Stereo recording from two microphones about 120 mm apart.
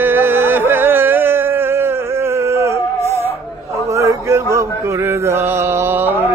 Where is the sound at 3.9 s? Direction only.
25° right (ahead or behind).